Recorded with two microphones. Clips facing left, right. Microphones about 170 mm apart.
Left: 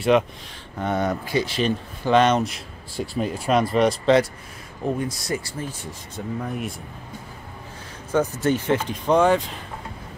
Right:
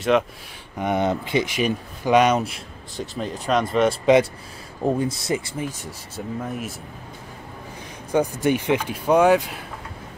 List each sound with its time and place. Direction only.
0.1 s speech: centre (ahead or behind)
0.7 s speech: 15° right (ahead or behind)
3.0 s speech: 5° left (ahead or behind)
4.0 s speech: 15° right (ahead or behind)
4.8 s speech: 25° right (ahead or behind); by 6.7 s centre (ahead or behind)
8.1 s speech: 15° right (ahead or behind)